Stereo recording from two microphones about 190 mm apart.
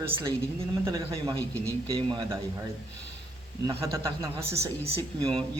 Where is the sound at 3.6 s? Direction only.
15° right (ahead or behind).